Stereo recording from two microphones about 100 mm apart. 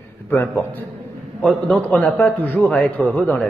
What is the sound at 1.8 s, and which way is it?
Speech, 15° left (ahead or behind).